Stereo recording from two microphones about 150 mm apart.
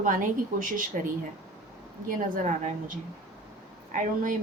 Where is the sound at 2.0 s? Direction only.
65° right (ahead or behind).